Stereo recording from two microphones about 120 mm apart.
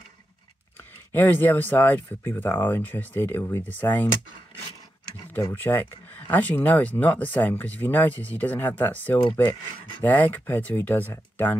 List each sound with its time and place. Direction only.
1.1 s speech: 15° left (ahead or behind)
5.5 s speech: 15° left (ahead or behind)